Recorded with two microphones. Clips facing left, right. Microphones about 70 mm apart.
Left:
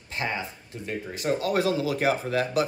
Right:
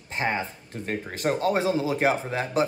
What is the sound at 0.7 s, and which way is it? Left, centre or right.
Speech, right.